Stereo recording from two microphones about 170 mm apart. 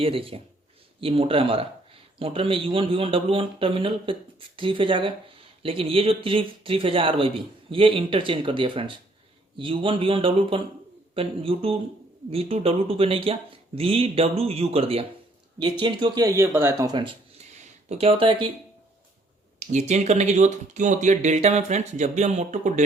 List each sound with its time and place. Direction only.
0.0 s a man's voice: 35° right (ahead or behind)
19.5 s speech: 45° right (ahead or behind)